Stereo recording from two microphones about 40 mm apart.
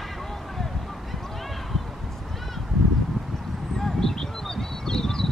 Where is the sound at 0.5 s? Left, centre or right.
Centre.